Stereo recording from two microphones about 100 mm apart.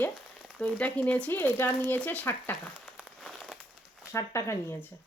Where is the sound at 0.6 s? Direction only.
15° left (ahead or behind).